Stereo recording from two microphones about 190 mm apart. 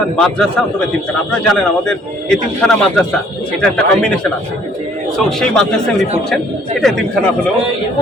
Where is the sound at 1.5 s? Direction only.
5° left (ahead or behind).